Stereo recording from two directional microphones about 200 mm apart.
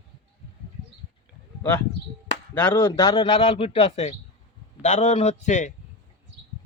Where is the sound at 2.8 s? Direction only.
20° left (ahead or behind).